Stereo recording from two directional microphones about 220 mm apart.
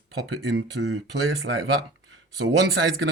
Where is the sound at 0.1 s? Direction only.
55° right (ahead or behind).